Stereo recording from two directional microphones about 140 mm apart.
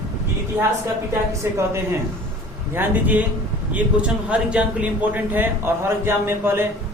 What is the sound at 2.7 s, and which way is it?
A man's voice, 10° right (ahead or behind).